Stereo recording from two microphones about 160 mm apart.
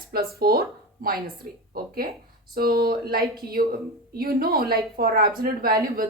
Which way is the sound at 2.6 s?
70° right (ahead or behind).